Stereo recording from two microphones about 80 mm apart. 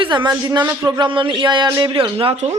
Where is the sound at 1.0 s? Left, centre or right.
Right.